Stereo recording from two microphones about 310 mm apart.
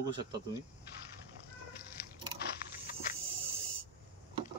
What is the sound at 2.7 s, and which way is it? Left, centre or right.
Snake, left.